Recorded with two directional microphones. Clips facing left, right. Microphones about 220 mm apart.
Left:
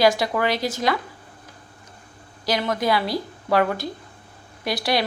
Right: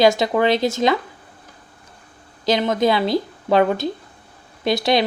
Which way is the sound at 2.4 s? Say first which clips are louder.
Right 5 dB; 20° right (ahead or behind).